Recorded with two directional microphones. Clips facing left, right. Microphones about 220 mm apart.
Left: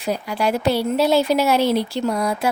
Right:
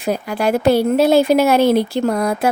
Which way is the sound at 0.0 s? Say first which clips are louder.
Right 3 dB; 50° right (ahead or behind).